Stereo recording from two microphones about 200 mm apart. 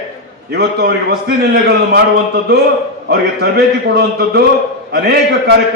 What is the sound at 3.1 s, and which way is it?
A man's voice, 55° right (ahead or behind).